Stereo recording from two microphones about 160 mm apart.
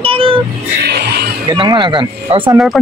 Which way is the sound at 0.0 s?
35° right (ahead or behind).